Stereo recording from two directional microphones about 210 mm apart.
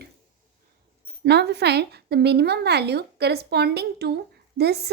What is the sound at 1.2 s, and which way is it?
A woman's voice, 55° right (ahead or behind).